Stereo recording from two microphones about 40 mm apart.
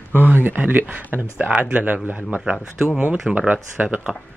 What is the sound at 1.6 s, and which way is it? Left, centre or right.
Speech, right.